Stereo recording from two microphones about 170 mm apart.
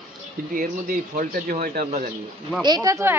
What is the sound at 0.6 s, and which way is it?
Speech, 55° right (ahead or behind).